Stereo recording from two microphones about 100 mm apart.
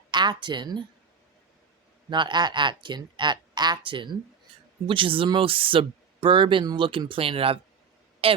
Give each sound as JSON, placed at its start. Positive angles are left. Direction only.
{"t": 0.1, "sound": "a woman's voice", "side_deg": -50}
{"t": 2.0, "sound": "speech", "side_deg": -50}
{"t": 7.1, "sound": "speech", "side_deg": -70}